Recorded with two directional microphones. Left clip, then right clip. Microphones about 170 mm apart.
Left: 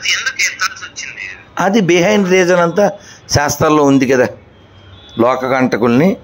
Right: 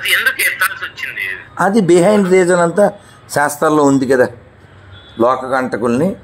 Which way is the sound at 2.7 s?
5° right (ahead or behind).